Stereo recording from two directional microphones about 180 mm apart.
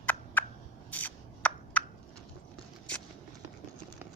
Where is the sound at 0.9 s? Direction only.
10° left (ahead or behind).